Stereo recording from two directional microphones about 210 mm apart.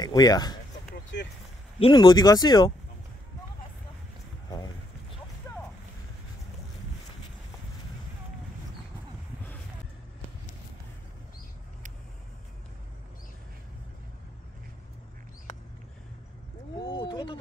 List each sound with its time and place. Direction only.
0.0 s speech: 20° left (ahead or behind)
1.8 s speech: 20° left (ahead or behind)
16.7 s a sound: 20° left (ahead or behind)